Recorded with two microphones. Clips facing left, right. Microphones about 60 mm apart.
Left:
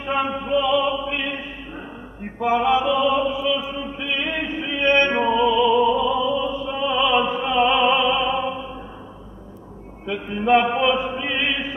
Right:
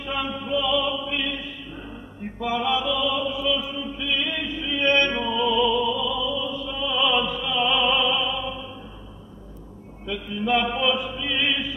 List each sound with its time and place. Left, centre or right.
0.0 s music: left
2.2 s mantra: left
5.4 s opera: centre
5.8 s chant: left
10.0 s chant: left